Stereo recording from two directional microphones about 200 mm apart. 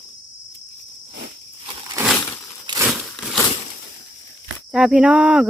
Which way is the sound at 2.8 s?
5° right (ahead or behind).